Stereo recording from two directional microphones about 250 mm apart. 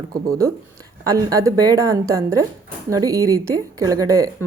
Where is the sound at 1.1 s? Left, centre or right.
Centre.